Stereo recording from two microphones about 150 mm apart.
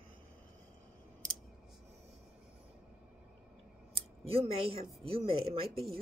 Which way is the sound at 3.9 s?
40° right (ahead or behind).